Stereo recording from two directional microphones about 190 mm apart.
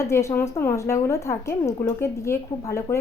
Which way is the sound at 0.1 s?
15° left (ahead or behind).